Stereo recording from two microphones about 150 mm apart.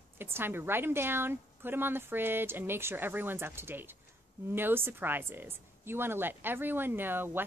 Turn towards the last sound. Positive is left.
turn(degrees=-15)  # may be behind; listen again after turning